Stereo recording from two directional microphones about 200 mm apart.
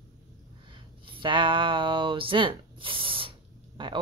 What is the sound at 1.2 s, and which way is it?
Speech, 25° right (ahead or behind).